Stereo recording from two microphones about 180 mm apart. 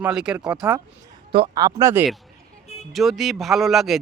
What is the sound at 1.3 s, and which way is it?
Speech, 25° right (ahead or behind).